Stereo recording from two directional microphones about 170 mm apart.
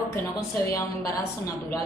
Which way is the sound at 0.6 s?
20° left (ahead or behind).